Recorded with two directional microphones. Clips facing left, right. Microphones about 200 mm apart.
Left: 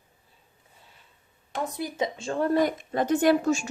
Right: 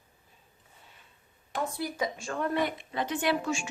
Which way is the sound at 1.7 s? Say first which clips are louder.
Left 3 dB; 20° left (ahead or behind).